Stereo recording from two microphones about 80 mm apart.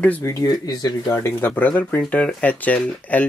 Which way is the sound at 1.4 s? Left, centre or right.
Left.